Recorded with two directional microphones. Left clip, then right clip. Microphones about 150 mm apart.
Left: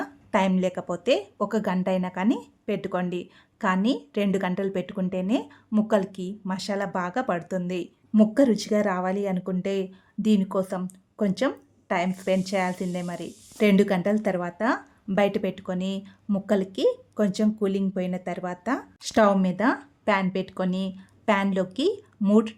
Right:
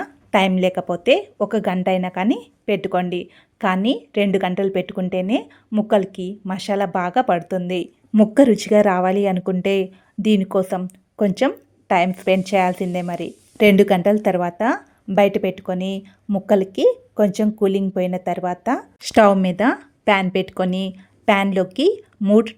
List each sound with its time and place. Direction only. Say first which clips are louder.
0.0 s a woman's voice: right 7 dB; 25° right (ahead or behind)
8.3 s a woman's voice: right 11 dB; 35° right (ahead or behind)